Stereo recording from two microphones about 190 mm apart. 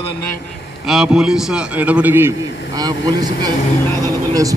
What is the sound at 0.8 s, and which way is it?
A man's voice, 5° right (ahead or behind).